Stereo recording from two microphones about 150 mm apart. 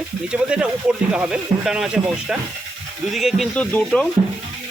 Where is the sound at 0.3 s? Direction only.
5° right (ahead or behind).